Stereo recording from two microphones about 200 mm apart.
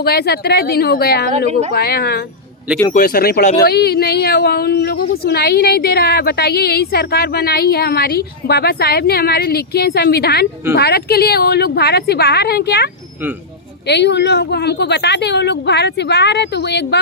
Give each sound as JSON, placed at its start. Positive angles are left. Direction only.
{"t": 0.0, "sound": "a woman's voice", "side_deg": 50}